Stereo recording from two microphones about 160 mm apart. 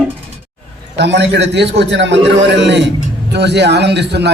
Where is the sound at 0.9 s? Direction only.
90° right.